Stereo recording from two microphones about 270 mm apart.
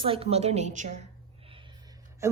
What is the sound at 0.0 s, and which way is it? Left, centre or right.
A woman's voice, centre.